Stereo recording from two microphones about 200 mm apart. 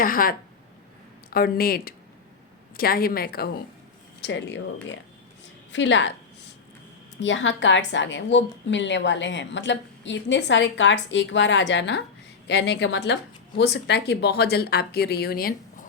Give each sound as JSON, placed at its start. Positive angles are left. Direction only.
{"t": 0.0, "sound": "a woman's voice", "side_deg": 45}
{"t": 4.2, "sound": "a woman's voice", "side_deg": 60}
{"t": 7.2, "sound": "a woman's voice", "side_deg": 65}